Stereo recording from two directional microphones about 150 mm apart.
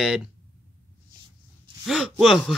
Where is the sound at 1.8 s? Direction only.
Centre (ahead or behind).